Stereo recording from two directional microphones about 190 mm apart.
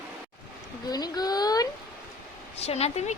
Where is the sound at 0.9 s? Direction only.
20° left (ahead or behind).